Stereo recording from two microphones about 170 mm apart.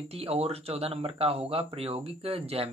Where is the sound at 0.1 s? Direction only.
35° right (ahead or behind).